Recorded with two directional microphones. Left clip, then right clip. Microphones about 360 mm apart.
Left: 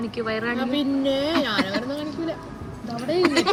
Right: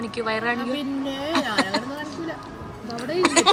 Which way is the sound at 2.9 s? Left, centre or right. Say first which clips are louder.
Left 1 dB; centre.